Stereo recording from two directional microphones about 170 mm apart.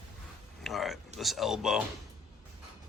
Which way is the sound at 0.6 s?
Centre (ahead or behind).